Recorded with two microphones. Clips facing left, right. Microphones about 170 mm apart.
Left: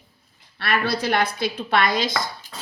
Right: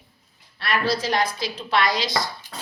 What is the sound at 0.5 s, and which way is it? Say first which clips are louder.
A woman's voice: even; 60° left (ahead or behind).